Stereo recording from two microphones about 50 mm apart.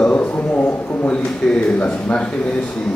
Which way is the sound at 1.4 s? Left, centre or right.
Centre.